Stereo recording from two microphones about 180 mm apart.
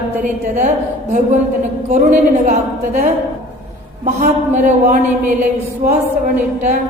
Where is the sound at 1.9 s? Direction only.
40° right (ahead or behind).